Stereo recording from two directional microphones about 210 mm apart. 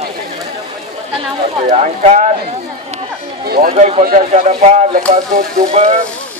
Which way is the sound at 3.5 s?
45° right (ahead or behind).